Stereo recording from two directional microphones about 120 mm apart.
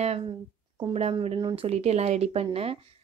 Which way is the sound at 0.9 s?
60° right (ahead or behind).